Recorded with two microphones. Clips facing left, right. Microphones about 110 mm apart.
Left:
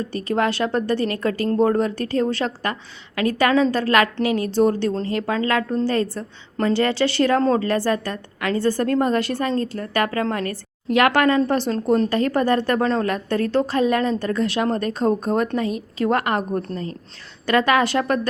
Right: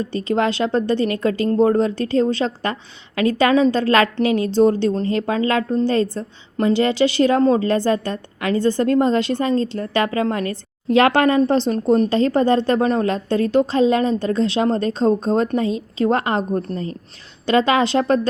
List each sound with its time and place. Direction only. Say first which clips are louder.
0.1 s a woman's voice: right 1 dB; 20° right (ahead or behind)